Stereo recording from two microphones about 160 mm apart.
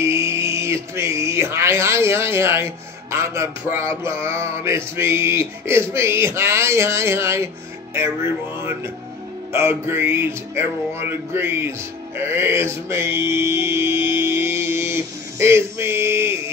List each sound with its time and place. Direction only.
0.0 s speech: 20° right (ahead or behind)
9.5 s speech: 15° right (ahead or behind)
12.2 s mantra: 15° right (ahead or behind)